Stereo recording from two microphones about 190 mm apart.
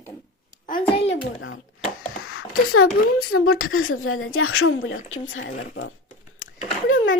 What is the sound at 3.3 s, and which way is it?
A woman's voice, 90° left.